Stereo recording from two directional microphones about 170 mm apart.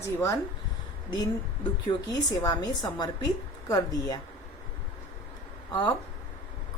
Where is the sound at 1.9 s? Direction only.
25° left (ahead or behind).